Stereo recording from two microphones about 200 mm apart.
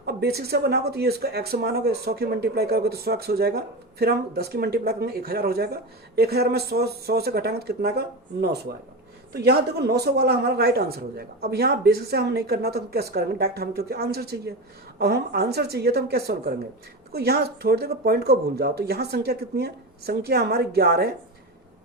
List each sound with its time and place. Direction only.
0.0 s speech: 55° right (ahead or behind)